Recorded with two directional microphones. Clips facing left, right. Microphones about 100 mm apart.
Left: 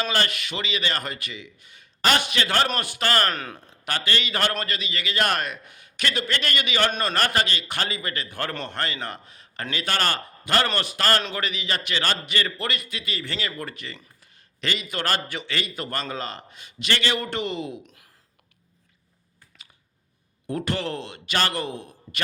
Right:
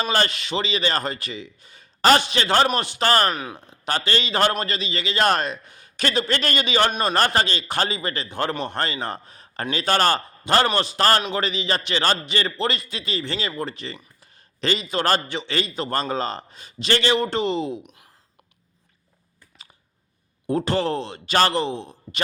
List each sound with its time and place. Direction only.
0.0 s a man's voice: 30° right (ahead or behind)
3.2 s speech: 10° right (ahead or behind)
3.7 s a man's voice: 30° right (ahead or behind)
20.5 s a man's voice: 30° right (ahead or behind)